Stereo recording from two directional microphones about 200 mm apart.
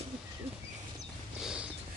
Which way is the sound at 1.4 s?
5° right (ahead or behind).